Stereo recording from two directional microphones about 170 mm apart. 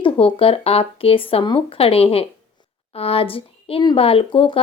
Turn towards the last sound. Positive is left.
turn(degrees=30)  # may be behind; listen again after turning